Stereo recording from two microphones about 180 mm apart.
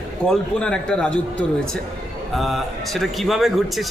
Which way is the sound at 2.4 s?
Centre (ahead or behind).